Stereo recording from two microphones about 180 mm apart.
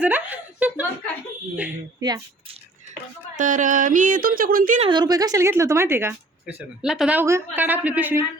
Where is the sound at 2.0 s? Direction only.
20° right (ahead or behind).